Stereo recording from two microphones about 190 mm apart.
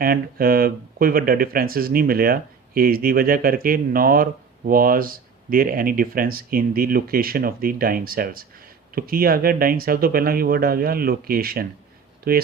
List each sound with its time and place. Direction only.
0.0 s speech: 50° right (ahead or behind)